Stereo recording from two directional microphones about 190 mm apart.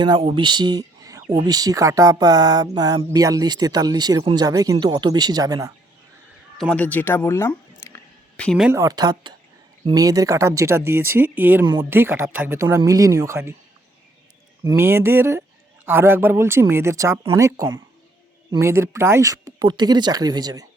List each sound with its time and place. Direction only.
0.0 s speech: 25° right (ahead or behind)
6.6 s a sound: 5° left (ahead or behind)
8.4 s speech: 5° right (ahead or behind)
8.7 s speech: 20° right (ahead or behind)
14.6 s speech: 15° right (ahead or behind)